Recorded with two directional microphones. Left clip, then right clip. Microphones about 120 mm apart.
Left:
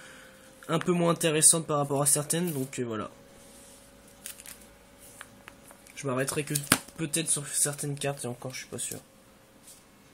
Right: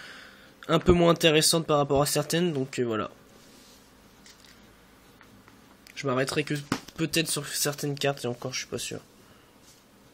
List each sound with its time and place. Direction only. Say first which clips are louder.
0.0 s speech: right 4 dB; 30° right (ahead or behind)
5.9 s speech: right 4 dB; 25° right (ahead or behind)